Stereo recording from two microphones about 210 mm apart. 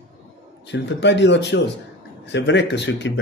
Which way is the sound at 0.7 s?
55° left (ahead or behind).